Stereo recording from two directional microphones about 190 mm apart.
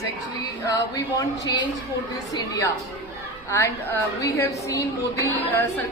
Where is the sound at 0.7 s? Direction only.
20° left (ahead or behind).